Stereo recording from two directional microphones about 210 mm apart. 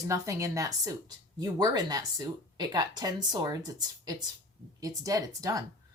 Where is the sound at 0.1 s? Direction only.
15° right (ahead or behind).